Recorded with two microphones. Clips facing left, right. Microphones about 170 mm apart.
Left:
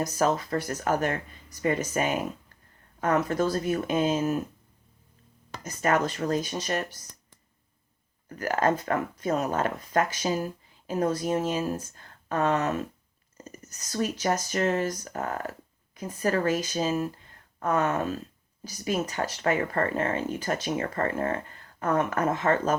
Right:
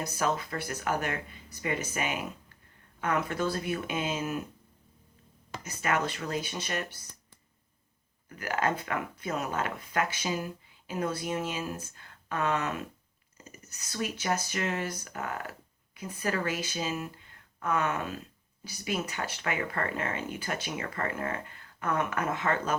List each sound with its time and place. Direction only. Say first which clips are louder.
0.0 s speech: left 5 dB; 40° left (ahead or behind)
5.6 s speech: left 5 dB; 45° left (ahead or behind)
8.3 s speech: left 5 dB; 40° left (ahead or behind)